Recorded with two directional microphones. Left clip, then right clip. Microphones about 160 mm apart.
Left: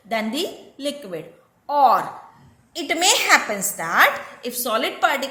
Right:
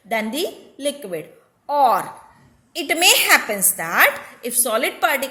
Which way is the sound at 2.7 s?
55° right (ahead or behind).